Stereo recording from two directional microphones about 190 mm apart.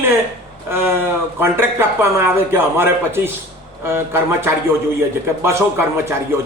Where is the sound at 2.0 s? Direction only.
15° right (ahead or behind).